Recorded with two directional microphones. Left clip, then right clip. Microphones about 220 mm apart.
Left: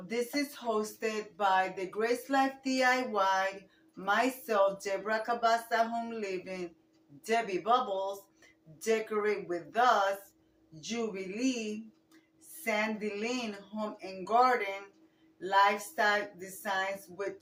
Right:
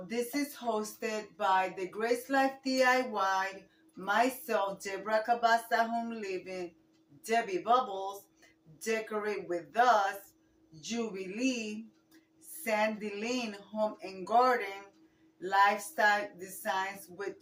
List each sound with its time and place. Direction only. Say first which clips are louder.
0.1 s speech: left 2 dB; 10° left (ahead or behind)